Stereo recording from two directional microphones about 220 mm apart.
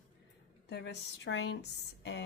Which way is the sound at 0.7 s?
50° left (ahead or behind).